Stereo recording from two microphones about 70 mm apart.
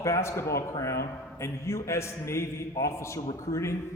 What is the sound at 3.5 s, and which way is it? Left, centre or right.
Speech, left.